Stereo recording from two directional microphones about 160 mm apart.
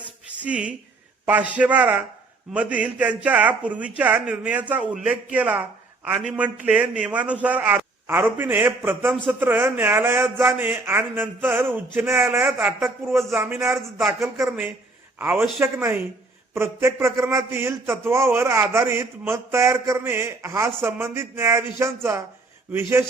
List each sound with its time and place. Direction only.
0.4 s a man's voice: 10° right (ahead or behind)
13.7 s speech: 5° right (ahead or behind)
14.1 s a man's voice: 20° right (ahead or behind)